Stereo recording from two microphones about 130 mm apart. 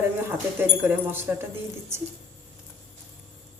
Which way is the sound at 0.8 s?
15° right (ahead or behind).